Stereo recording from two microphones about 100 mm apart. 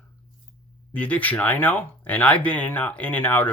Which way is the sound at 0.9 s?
15° left (ahead or behind).